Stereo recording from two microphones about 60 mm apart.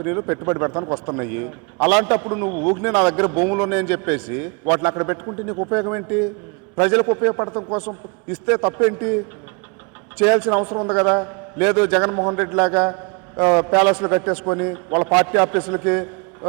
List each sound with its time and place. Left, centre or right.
0.0 s a man's voice: right
5.2 s a man's voice: right
7.8 s a man's voice: right
12.1 s a man's voice: right